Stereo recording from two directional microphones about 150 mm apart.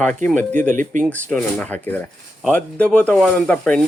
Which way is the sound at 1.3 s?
10° left (ahead or behind).